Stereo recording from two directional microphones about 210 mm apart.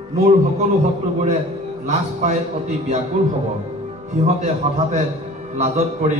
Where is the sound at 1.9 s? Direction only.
35° right (ahead or behind).